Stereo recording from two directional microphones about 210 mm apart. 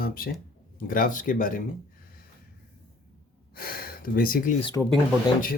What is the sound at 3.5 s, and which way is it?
Speech, 45° left (ahead or behind).